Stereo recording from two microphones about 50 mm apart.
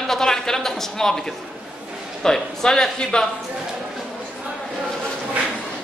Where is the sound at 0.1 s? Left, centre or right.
Centre.